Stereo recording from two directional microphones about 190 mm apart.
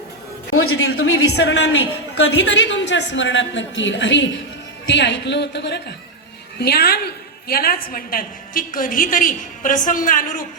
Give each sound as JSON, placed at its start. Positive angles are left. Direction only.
{"t": 0.5, "sound": "a woman's voice", "side_deg": 90}